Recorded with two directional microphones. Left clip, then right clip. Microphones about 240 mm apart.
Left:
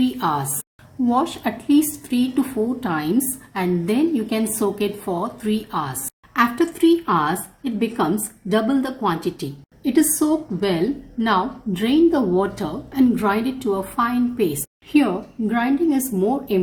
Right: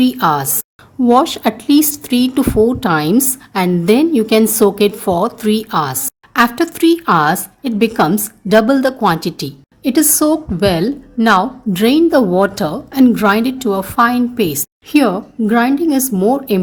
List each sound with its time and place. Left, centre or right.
0.0 s a woman's voice: right